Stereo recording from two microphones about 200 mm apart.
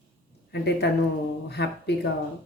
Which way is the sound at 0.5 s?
55° left (ahead or behind).